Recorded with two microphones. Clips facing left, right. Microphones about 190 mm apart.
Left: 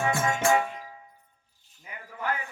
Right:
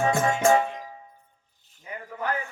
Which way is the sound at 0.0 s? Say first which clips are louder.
Right 4 dB; 40° right (ahead or behind).